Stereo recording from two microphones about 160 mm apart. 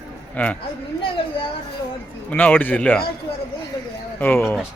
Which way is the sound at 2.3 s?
10° left (ahead or behind).